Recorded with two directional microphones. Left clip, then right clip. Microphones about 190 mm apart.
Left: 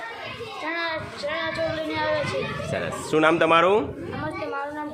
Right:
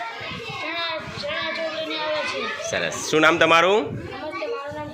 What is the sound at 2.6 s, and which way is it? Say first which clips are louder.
A man's voice: right 3 dB; centre (ahead or behind).